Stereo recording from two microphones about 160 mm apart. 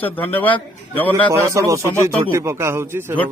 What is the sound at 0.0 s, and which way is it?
Speech, 10° left (ahead or behind).